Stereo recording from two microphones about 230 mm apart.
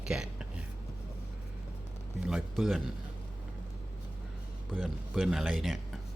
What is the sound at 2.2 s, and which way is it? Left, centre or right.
Speech, centre.